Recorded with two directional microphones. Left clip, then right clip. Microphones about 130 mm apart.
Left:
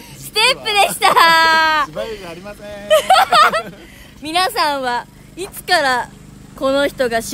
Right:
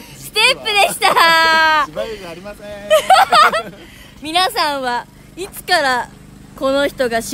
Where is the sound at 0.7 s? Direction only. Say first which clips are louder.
Even; 25° right (ahead or behind).